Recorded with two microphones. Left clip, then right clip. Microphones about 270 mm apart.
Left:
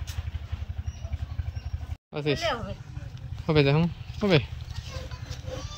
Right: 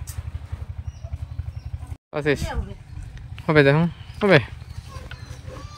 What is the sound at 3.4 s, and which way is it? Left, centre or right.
Speech, centre.